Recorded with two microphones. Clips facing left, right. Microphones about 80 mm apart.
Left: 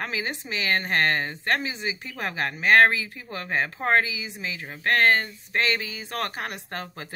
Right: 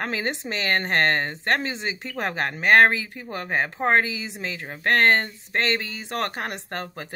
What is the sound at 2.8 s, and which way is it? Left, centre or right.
A woman's voice, right.